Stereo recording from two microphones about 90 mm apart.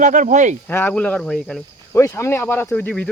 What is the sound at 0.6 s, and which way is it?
Speech, 20° left (ahead or behind).